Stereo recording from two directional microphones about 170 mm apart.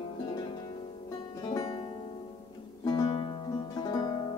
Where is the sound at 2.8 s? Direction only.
25° left (ahead or behind).